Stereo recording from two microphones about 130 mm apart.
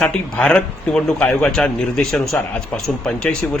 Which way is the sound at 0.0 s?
10° left (ahead or behind).